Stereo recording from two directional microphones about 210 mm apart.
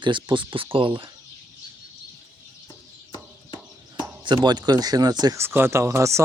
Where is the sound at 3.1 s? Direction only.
20° left (ahead or behind).